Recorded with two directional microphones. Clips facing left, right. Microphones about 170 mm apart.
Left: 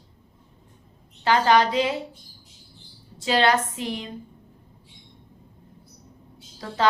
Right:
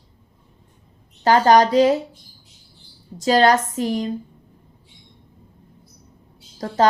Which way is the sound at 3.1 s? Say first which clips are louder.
Right 5 dB; 40° right (ahead or behind).